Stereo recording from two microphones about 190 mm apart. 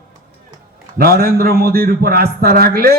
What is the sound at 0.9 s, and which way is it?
A man's voice, 50° right (ahead or behind).